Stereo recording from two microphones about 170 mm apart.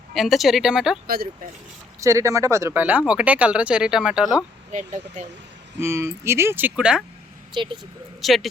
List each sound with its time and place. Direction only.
0.1 s speech: centre (ahead or behind)
1.0 s speech: 60° right (ahead or behind)
2.0 s speech: 20° right (ahead or behind)
4.7 s speech: 45° right (ahead or behind)
5.8 s speech: 15° right (ahead or behind)
7.5 s speech: 30° right (ahead or behind)
8.2 s speech: centre (ahead or behind)